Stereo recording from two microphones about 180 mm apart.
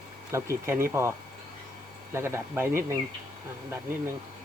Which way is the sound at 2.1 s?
15° right (ahead or behind).